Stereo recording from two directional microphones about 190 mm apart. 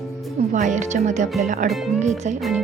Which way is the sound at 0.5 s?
40° right (ahead or behind).